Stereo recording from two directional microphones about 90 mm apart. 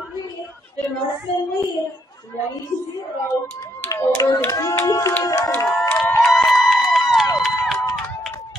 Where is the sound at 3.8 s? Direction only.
30° left (ahead or behind).